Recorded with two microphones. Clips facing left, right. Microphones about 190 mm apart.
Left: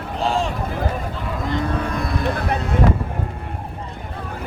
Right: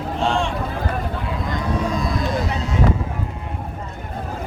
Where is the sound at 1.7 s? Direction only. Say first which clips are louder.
Right 1 dB; 60° left (ahead or behind).